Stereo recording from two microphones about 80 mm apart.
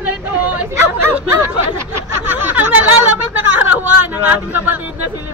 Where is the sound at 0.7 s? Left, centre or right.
Right.